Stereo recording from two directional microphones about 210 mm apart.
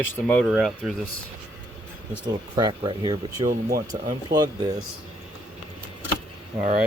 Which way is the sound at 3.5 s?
45° right (ahead or behind).